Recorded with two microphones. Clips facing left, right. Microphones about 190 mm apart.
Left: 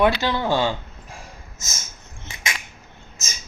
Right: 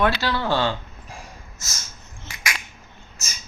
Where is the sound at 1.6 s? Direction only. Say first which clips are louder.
Left 3 dB; 20° left (ahead or behind).